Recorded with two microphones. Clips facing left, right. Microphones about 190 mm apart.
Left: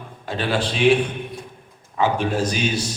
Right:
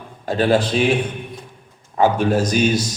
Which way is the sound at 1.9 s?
45° right (ahead or behind).